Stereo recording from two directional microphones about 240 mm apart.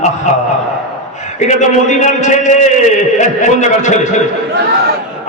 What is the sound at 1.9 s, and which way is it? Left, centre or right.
A man's voice, left.